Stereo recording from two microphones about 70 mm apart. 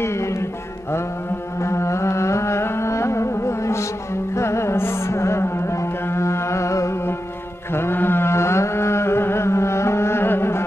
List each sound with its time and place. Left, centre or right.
0.0 s music: left
1.6 s carnatic music: left
7.7 s mantra: left